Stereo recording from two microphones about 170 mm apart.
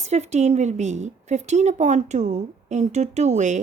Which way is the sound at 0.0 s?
40° right (ahead or behind).